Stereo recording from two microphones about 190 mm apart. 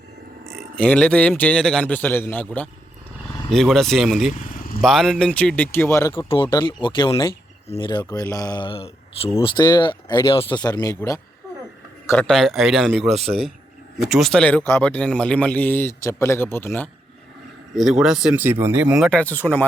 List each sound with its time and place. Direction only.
0.8 s a man's voice: 5° left (ahead or behind)
6.1 s speech: 25° left (ahead or behind)
12.0 s speech: 5° left (ahead or behind)
13.1 s speech: 30° right (ahead or behind)
14.0 s a man's voice: centre (ahead or behind)
17.7 s speech: centre (ahead or behind)